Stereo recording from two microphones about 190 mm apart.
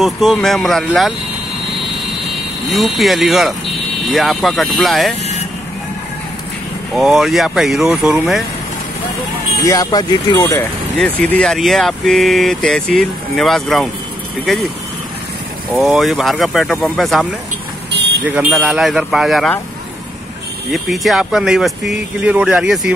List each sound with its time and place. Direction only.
0.0 s speech: centre (ahead or behind)
2.7 s speech: centre (ahead or behind)
7.0 s speech: centre (ahead or behind)
9.7 s speech: 20° left (ahead or behind)
10.6 s speech: 10° left (ahead or behind)
15.7 s speech: centre (ahead or behind)
20.7 s speech: centre (ahead or behind)